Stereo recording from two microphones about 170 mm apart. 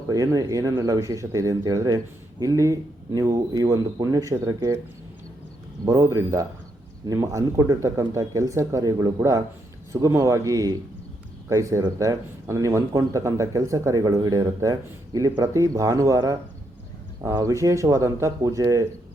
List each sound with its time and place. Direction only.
0.1 s speech: 20° right (ahead or behind)
5.8 s speech: 20° right (ahead or behind)